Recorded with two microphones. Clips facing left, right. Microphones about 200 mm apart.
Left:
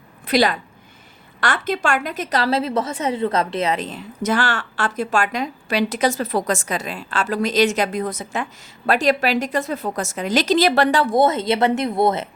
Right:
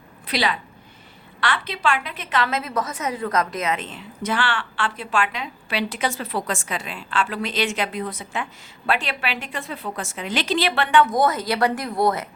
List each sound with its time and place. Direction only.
0.3 s a woman's voice: 45° left (ahead or behind); by 12.3 s 25° left (ahead or behind)